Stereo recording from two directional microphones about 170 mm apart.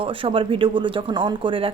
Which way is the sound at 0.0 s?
30° right (ahead or behind).